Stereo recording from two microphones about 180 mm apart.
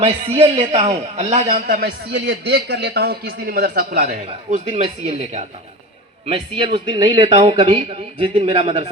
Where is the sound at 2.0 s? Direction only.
75° right (ahead or behind); by 4.2 s 50° right (ahead or behind).